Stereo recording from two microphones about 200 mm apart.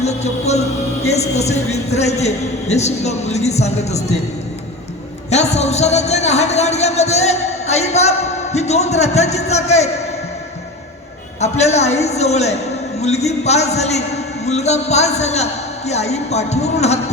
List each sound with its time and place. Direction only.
0.0 s music: 35° left (ahead or behind)
1.0 s speech: 35° left (ahead or behind)
5.3 s speech: 35° left (ahead or behind)
11.3 s speech: 35° left (ahead or behind)